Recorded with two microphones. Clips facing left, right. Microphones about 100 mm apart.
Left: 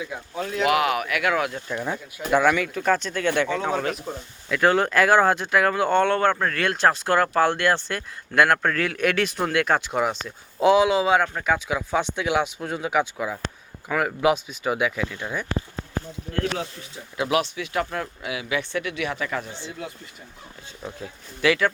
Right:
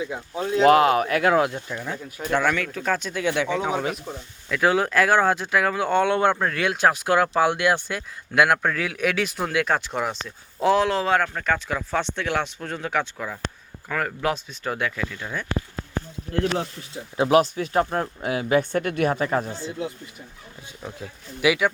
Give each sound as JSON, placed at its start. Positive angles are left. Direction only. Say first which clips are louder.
{"t": 0.0, "sound": "speech", "louder": "right 2 dB", "side_deg": -25}
{"t": 2.3, "sound": "speech", "louder": "left 3 dB", "side_deg": 5}
{"t": 4.0, "sound": "speech", "louder": "left 2 dB", "side_deg": 5}
{"t": 17.2, "sound": "speech", "louder": "right 5 dB", "side_deg": -40}
{"t": 20.8, "sound": "speech", "louder": "left 1 dB", "side_deg": -5}